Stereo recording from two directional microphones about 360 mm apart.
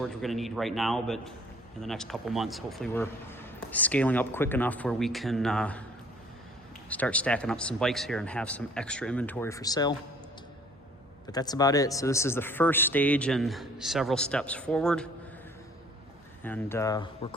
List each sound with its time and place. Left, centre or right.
0.0 s speech: centre
6.9 s speech: centre
11.3 s speech: centre
16.4 s speech: centre